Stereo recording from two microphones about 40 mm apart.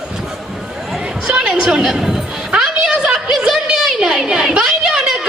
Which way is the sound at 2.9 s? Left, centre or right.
Right.